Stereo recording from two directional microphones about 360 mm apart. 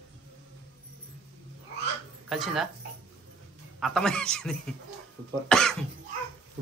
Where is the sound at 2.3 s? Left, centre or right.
Centre.